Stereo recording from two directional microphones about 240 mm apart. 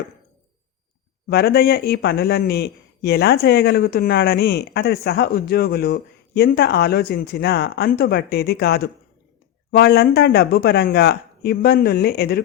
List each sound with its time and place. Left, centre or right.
1.3 s speech: left